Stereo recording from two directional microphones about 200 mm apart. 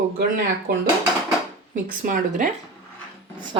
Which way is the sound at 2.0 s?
40° right (ahead or behind).